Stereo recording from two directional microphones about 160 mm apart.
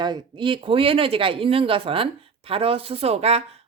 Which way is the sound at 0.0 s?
30° right (ahead or behind).